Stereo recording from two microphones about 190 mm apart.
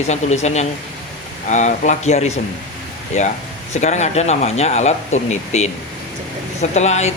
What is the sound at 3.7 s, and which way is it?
Speech, 40° left (ahead or behind).